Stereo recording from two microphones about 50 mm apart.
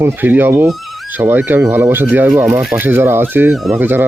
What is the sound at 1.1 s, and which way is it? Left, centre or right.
Speech, right.